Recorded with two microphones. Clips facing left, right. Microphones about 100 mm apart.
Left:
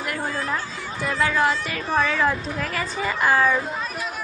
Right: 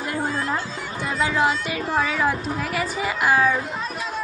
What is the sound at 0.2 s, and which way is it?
A woman's voice, 20° right (ahead or behind).